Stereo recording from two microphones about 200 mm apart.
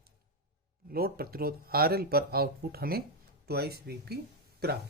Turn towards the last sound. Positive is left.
turn(degrees=-50)  # may be behind; listen again after turning